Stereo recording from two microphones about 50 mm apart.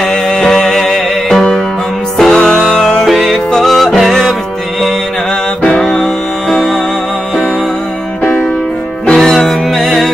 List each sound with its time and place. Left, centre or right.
0.1 s music: centre
5.8 s music: centre
9.0 s music: centre